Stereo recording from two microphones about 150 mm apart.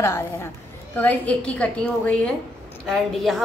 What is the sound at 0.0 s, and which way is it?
A woman's voice, 15° left (ahead or behind).